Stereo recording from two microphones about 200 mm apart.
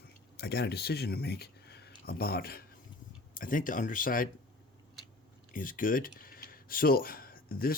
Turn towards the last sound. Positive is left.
turn(degrees=45)  # may be behind; listen again after turning